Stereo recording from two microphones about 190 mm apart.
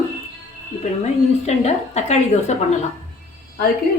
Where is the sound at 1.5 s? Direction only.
35° left (ahead or behind).